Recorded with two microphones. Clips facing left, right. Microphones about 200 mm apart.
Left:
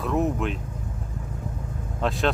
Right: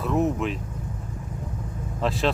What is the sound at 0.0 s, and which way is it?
Speech, centre (ahead or behind).